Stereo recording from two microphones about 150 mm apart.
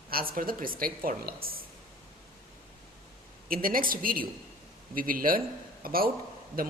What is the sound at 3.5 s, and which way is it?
Speech, 70° right (ahead or behind).